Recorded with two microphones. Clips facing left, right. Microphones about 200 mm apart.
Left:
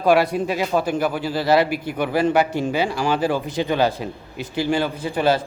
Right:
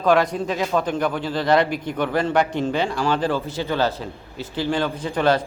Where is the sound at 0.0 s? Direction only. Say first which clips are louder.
Left 1 dB; 10° left (ahead or behind).